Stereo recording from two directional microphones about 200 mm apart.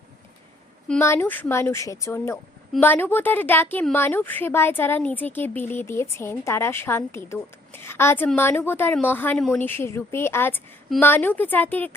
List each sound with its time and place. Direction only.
0.9 s a woman's voice: 10° left (ahead or behind)